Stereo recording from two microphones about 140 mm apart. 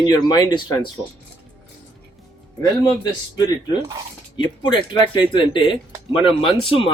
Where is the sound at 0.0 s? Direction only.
30° left (ahead or behind).